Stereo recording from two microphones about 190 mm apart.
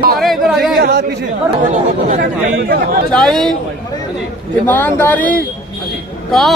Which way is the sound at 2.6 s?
55° right (ahead or behind).